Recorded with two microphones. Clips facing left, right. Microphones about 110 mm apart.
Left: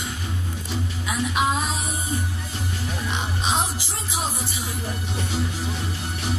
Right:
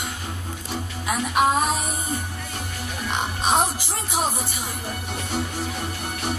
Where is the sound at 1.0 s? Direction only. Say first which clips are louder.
Right 3 dB; 50° right (ahead or behind).